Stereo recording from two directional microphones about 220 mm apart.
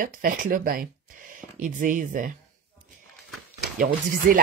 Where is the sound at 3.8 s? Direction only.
40° right (ahead or behind).